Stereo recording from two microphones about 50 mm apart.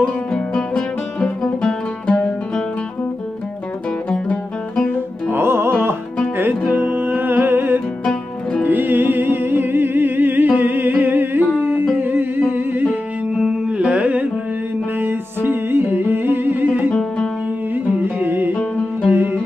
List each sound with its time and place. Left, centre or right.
0.0 s music: centre
5.3 s music: right
6.7 s music: right
8.0 s music: centre
8.6 s music: right
13.7 s carnatic music: right
15.0 s music: right
18.0 s music: right